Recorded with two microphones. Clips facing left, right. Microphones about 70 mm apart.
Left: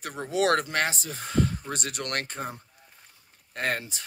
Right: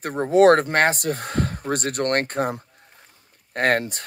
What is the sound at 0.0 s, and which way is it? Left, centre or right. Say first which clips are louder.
Speech: right 11 dB; right.